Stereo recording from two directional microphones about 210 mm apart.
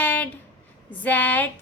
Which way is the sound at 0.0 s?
5° left (ahead or behind).